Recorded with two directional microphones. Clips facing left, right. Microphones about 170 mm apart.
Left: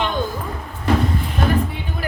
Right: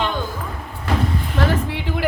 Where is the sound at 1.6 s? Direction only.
90° right.